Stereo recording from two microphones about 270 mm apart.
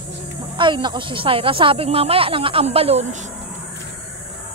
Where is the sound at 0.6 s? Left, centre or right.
Centre.